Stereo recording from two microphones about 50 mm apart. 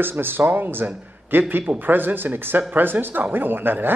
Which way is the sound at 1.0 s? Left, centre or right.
Right.